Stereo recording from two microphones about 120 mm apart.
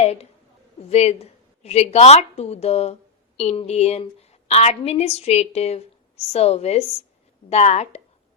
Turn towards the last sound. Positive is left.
turn(degrees=65)  # may be behind; listen again after turning